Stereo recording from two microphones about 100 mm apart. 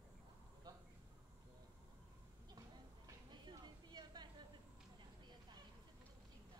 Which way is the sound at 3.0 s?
45° right (ahead or behind).